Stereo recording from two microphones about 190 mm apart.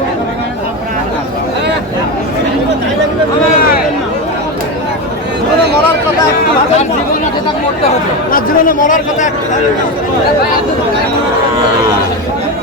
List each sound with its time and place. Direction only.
8.3 s a man's voice: 50° left (ahead or behind)